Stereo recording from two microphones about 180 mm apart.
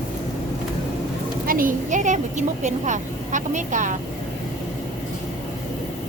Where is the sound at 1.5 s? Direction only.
50° right (ahead or behind).